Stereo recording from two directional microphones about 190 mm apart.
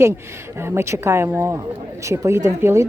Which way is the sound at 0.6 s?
15° right (ahead or behind).